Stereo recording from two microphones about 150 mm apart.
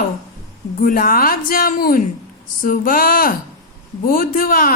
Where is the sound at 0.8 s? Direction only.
70° left (ahead or behind).